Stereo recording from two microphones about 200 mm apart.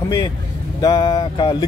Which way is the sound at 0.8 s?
20° left (ahead or behind).